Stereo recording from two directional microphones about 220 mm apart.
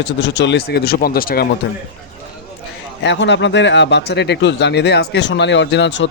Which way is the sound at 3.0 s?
55° left (ahead or behind).